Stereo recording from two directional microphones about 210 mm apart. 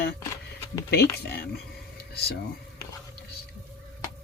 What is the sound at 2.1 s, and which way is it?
Speech, 50° left (ahead or behind).